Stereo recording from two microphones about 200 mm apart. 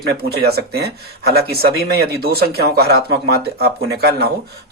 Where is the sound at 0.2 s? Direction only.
50° right (ahead or behind).